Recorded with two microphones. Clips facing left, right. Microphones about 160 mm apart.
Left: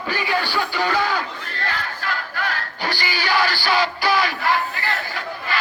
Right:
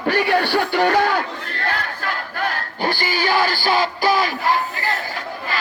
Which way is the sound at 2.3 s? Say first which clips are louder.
Right 2 dB; 50° right (ahead or behind).